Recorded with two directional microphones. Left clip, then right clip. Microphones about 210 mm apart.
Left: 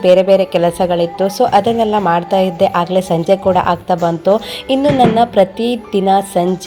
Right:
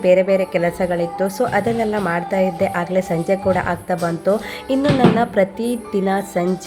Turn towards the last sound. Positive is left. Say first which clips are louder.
# left 7 dB
turn(degrees=0)  # may be behind; listen again after turning